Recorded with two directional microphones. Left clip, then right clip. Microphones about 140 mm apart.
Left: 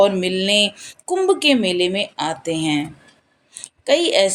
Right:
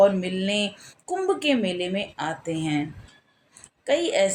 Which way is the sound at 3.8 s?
40° left (ahead or behind).